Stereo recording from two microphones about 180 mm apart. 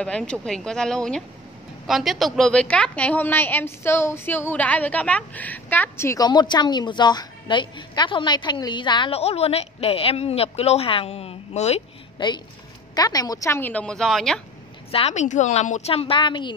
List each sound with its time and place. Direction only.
0.0 s a woman's voice: 5° left (ahead or behind); by 11.8 s 35° left (ahead or behind)
12.2 s a woman's voice: 25° left (ahead or behind); by 14.4 s centre (ahead or behind)
14.9 s a woman's voice: 35° left (ahead or behind)